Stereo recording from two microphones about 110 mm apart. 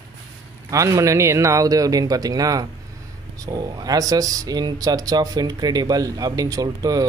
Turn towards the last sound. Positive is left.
turn(degrees=-35)  # may be behind; listen again after turning